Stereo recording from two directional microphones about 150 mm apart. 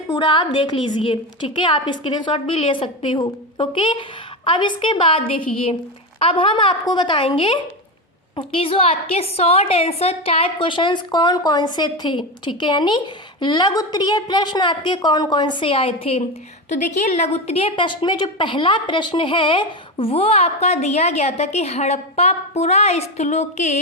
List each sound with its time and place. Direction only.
0.1 s a woman's voice: 30° left (ahead or behind)
16.6 s a woman's voice: 50° left (ahead or behind)